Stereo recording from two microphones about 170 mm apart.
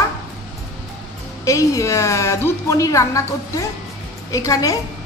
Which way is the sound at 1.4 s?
20° left (ahead or behind).